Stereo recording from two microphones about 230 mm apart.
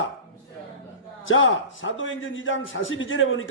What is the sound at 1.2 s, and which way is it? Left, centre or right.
A man's voice, left.